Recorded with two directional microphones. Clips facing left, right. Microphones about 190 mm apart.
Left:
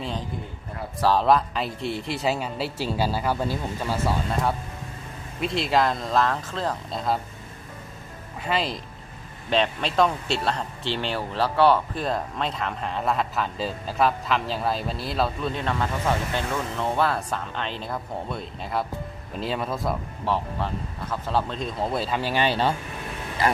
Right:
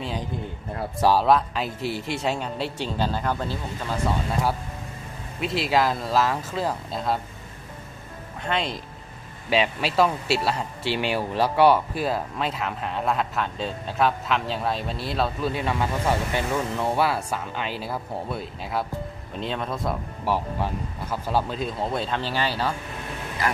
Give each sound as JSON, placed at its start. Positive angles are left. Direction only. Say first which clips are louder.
{"t": 1.0, "sound": "speech", "louder": "right 1 dB", "side_deg": -5}
{"t": 4.3, "sound": "speech", "louder": "even", "side_deg": -5}
{"t": 8.4, "sound": "speech", "louder": "left 1 dB", "side_deg": 5}
{"t": 20.2, "sound": "speech", "louder": "right 1 dB", "side_deg": -10}
{"t": 22.3, "sound": "speech", "louder": "left 6 dB", "side_deg": 20}